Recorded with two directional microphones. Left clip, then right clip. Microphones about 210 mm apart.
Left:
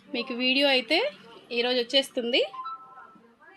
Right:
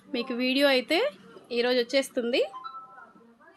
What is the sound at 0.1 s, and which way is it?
A woman's voice, 10° right (ahead or behind).